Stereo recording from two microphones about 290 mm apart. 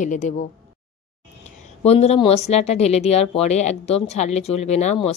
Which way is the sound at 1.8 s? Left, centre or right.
Left.